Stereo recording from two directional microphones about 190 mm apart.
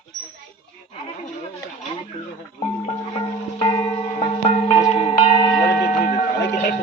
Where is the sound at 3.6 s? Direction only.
20° left (ahead or behind).